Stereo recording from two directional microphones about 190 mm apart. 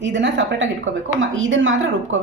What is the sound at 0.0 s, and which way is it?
Speech, 70° right (ahead or behind).